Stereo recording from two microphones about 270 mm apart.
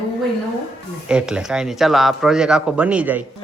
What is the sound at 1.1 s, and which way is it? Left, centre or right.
Speech, centre.